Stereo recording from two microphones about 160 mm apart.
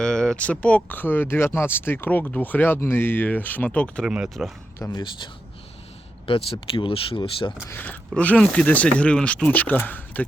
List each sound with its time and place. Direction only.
0.0 s speech: 5° left (ahead or behind)
4.0 s speech: 5° right (ahead or behind)
4.8 s a man's voice: 25° left (ahead or behind)
7.7 s speech: 10° left (ahead or behind)